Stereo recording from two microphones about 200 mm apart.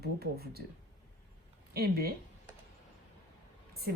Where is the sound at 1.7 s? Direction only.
50° right (ahead or behind).